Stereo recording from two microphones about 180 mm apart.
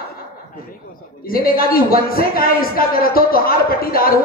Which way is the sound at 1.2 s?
55° left (ahead or behind).